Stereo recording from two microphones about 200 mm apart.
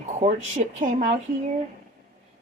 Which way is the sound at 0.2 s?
35° right (ahead or behind).